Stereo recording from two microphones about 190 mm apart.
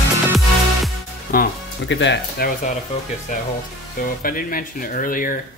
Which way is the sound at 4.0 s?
50° left (ahead or behind).